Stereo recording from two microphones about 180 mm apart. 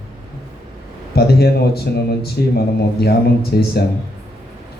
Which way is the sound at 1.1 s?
60° left (ahead or behind).